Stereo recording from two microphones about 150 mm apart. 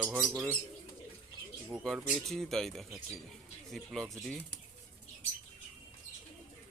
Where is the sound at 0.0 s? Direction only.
5° right (ahead or behind).